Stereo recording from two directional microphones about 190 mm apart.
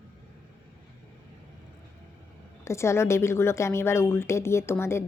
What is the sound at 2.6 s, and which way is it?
A woman's voice, 15° left (ahead or behind).